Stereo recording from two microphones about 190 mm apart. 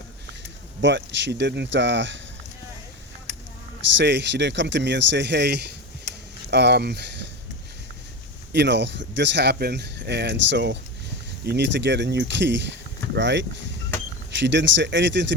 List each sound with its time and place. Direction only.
0.8 s speech: 70° right (ahead or behind)
3.9 s speech: 65° right (ahead or behind)
8.5 s speech: 65° right (ahead or behind)